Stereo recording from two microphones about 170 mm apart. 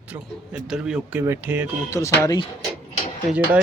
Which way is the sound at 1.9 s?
20° left (ahead or behind).